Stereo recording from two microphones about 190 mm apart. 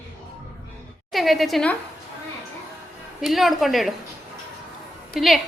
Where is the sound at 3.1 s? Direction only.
Centre (ahead or behind).